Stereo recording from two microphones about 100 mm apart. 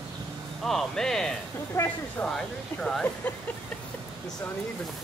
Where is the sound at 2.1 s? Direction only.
5° left (ahead or behind).